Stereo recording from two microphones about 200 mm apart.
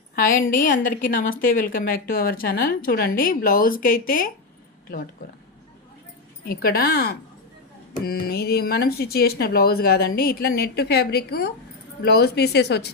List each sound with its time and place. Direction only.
0.2 s speech: 45° left (ahead or behind)
6.4 s speech: 50° left (ahead or behind)